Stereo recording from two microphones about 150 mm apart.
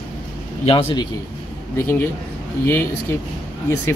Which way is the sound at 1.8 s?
15° left (ahead or behind).